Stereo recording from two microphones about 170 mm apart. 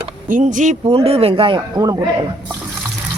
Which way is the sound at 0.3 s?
50° right (ahead or behind).